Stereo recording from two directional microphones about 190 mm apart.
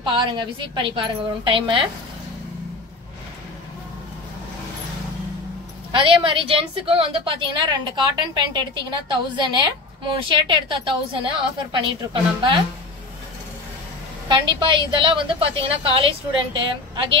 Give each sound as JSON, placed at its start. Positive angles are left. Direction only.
{"t": 0.0, "sound": "a woman's voice", "side_deg": -25}
{"t": 5.9, "sound": "a woman's voice", "side_deg": -25}
{"t": 14.3, "sound": "a woman's voice", "side_deg": -25}